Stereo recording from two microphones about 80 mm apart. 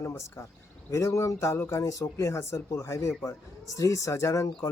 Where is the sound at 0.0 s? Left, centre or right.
Left.